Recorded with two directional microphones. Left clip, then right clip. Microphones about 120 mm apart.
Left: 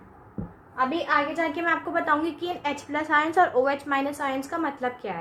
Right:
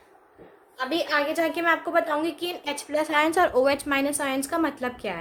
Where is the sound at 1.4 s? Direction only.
65° right (ahead or behind).